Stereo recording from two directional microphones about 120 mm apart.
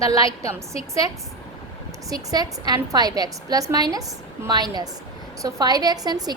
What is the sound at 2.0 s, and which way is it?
A woman's voice, 30° right (ahead or behind).